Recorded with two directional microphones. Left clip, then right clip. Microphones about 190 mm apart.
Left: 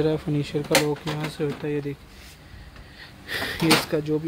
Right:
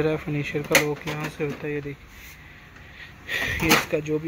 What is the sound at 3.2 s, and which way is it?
Speech, 30° left (ahead or behind).